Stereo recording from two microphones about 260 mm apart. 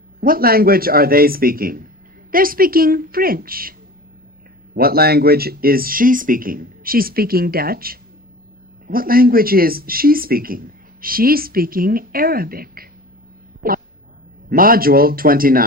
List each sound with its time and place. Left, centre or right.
0.2 s speech: right
13.6 s a sound: right
14.5 s speech: right